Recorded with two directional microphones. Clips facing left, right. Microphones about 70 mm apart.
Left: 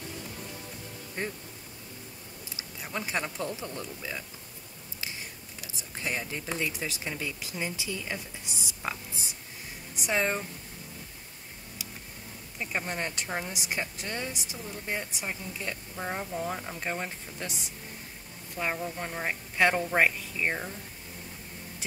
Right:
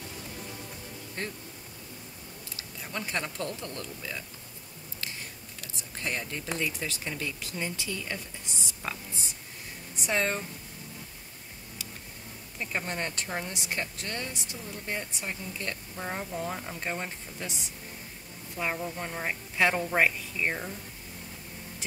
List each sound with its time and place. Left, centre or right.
1.2 s speech: centre
2.5 s speech: centre
5.6 s speech: centre
11.8 s tick: centre
12.5 s speech: centre
18.6 s speech: centre